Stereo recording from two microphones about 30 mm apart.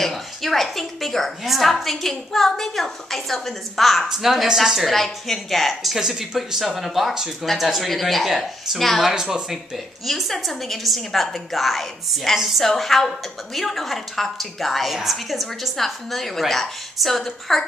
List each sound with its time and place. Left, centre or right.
0.0 s a woman's voice: centre
4.1 s a woman's voice: centre
4.9 s a woman's voice: centre
5.9 s a woman's voice: centre
9.1 s speech: centre
10.0 s a woman's voice: centre
11.0 s a woman's voice: centre
11.3 s a woman's voice: centre
15.8 s a woman's voice: centre